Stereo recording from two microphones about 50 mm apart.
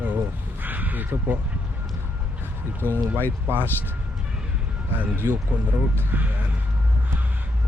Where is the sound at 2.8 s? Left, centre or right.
Right.